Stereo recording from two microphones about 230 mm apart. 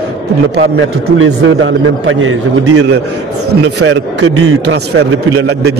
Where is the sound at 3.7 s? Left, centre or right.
Right.